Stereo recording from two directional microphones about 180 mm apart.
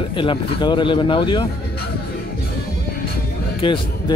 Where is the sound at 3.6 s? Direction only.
30° left (ahead or behind).